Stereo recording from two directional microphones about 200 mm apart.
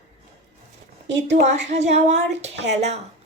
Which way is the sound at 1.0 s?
60° right (ahead or behind).